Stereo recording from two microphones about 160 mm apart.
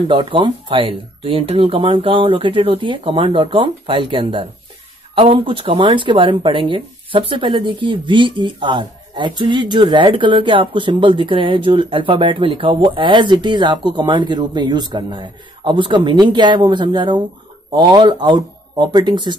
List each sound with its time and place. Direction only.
0.1 s speech: 30° right (ahead or behind)